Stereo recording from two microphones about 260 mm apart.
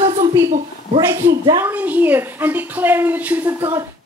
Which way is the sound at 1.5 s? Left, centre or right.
Centre.